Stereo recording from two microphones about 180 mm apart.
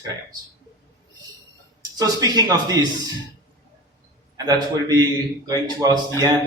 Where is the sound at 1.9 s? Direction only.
20° right (ahead or behind).